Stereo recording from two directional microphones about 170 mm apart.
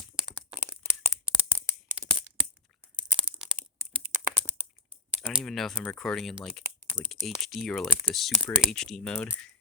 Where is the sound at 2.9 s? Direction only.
30° right (ahead or behind).